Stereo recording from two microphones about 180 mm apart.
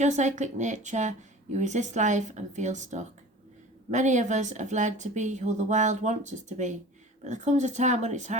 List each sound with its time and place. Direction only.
0.0 s speech: 40° right (ahead or behind)